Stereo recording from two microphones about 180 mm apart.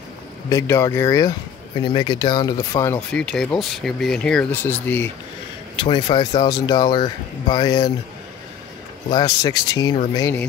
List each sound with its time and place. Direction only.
0.5 s speech: 15° left (ahead or behind)
3.1 s speech: 5° left (ahead or behind)
5.8 s speech: 25° left (ahead or behind)
9.1 s speech: 20° left (ahead or behind)